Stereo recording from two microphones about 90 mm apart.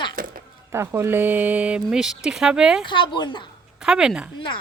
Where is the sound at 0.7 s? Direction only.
30° right (ahead or behind); by 2.8 s 10° right (ahead or behind).